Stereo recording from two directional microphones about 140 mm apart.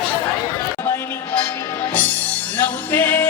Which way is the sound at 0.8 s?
15° left (ahead or behind).